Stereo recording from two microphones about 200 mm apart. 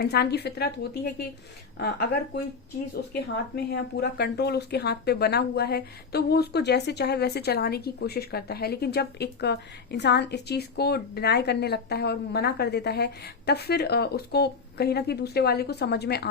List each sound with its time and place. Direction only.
0.0 s a woman's voice: 55° left (ahead or behind)